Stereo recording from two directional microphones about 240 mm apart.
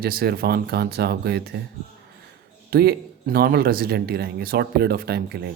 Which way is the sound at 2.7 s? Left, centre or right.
Right.